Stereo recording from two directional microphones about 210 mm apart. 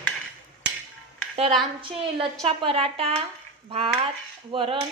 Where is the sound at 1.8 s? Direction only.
25° right (ahead or behind).